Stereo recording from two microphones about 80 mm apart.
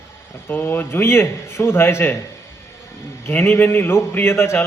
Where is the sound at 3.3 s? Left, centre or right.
Left.